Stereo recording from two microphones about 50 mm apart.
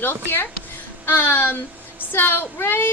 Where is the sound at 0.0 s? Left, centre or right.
Left.